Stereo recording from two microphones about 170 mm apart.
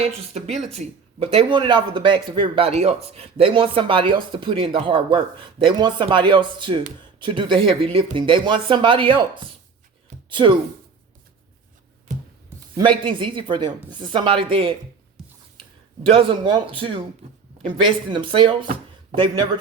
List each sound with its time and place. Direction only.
0.0 s speech: 40° right (ahead or behind)
12.7 s speech: 30° right (ahead or behind)
16.0 s speech: 30° right (ahead or behind)